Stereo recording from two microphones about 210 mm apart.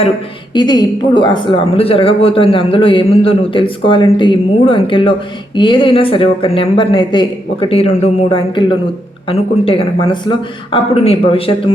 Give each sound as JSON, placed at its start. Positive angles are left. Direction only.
{"t": 0.5, "sound": "a man's voice", "side_deg": 20}